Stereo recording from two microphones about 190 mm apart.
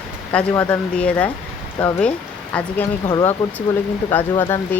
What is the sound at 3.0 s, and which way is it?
Speech, 20° left (ahead or behind).